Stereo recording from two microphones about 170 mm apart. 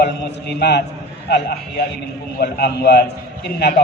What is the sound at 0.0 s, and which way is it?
Speech, 80° left.